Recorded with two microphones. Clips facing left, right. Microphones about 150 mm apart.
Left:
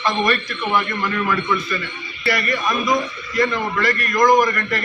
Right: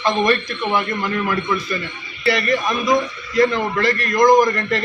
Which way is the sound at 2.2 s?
25° right (ahead or behind).